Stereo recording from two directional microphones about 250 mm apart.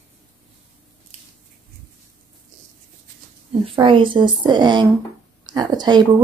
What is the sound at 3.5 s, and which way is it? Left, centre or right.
Speech, centre.